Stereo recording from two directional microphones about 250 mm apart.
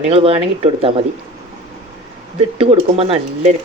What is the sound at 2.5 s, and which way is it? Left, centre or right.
Speech, right.